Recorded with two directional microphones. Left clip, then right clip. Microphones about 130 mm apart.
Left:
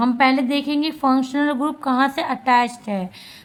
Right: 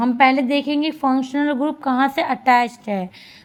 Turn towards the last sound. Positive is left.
turn(degrees=-30)  # may be behind; listen again after turning